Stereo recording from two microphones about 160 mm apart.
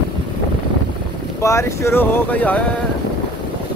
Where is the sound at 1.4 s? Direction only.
15° left (ahead or behind).